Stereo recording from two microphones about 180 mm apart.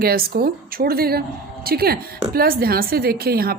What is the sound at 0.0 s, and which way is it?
A woman's voice, 55° right (ahead or behind).